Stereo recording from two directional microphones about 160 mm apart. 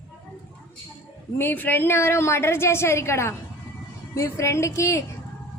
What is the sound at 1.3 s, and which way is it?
A woman's voice, 15° left (ahead or behind).